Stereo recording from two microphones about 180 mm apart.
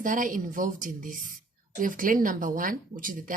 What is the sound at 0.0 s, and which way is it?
Speech, 45° right (ahead or behind).